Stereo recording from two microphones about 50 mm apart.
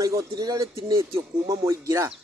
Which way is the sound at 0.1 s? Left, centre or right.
Right.